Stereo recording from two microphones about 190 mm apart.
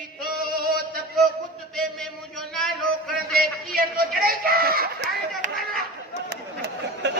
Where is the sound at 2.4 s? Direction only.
Centre (ahead or behind).